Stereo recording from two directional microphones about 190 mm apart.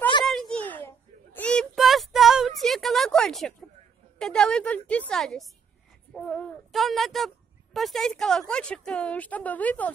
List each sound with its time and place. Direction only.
0.2 s a sound: centre (ahead or behind)
0.8 s child singing: 10° left (ahead or behind)
4.2 s speech: 5° left (ahead or behind)